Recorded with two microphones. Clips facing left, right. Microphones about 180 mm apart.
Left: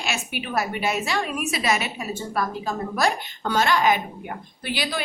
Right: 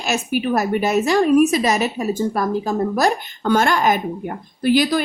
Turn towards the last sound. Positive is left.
turn(degrees=-45)  # may be behind; listen again after turning